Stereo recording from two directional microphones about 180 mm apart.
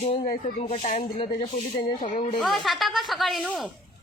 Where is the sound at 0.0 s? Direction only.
30° left (ahead or behind).